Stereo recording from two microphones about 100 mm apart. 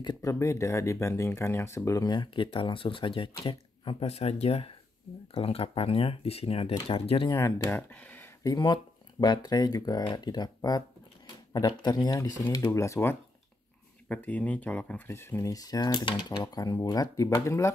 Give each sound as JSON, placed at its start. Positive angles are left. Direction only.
{"t": 0.0, "sound": "speech", "side_deg": 45}
{"t": 0.3, "sound": "speech", "side_deg": 30}
{"t": 2.0, "sound": "speech", "side_deg": 55}
{"t": 5.3, "sound": "speech", "side_deg": 75}
{"t": 7.3, "sound": "speech", "side_deg": 30}
{"t": 7.7, "sound": "speech", "side_deg": 15}
{"t": 8.5, "sound": "speech", "side_deg": 45}
{"t": 14.0, "sound": "speech", "side_deg": 15}
{"t": 15.0, "sound": "speech", "side_deg": 25}
{"t": 15.5, "sound": "speech", "side_deg": 40}